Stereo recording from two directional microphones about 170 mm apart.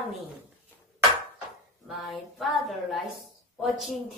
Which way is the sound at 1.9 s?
Centre (ahead or behind).